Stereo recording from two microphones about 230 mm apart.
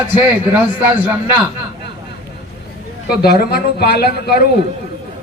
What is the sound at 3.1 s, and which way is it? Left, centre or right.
A man's voice, left.